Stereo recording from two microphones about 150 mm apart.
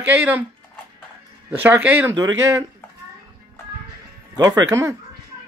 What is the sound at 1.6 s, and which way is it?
Speech, 10° right (ahead or behind).